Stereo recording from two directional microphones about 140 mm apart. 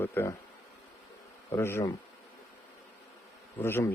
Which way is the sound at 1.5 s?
20° left (ahead or behind).